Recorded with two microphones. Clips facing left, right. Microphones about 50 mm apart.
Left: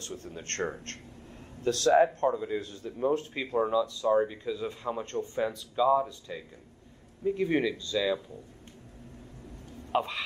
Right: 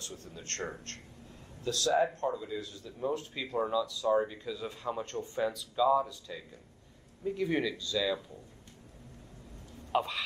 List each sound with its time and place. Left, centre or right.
0.0 s speech: left
3.5 s a sound: centre
4.1 s speech: centre
5.0 s speech: left
5.8 s speech: centre
9.9 s a sound: centre